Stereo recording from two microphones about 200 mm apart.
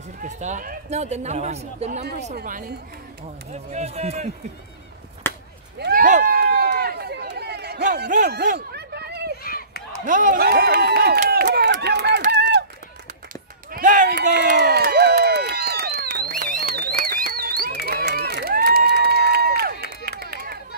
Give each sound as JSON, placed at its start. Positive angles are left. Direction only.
{"t": 0.2, "sound": "speech", "side_deg": -40}
{"t": 5.2, "sound": "a sound", "side_deg": 10}
{"t": 5.8, "sound": "run", "side_deg": -45}
{"t": 9.4, "sound": "a sound", "side_deg": 45}
{"t": 9.9, "sound": "run", "side_deg": -40}
{"t": 12.3, "sound": "a sound", "side_deg": -55}
{"t": 13.7, "sound": "run", "side_deg": -40}
{"t": 14.6, "sound": "crowd", "side_deg": -55}
{"t": 20.1, "sound": "run", "side_deg": -50}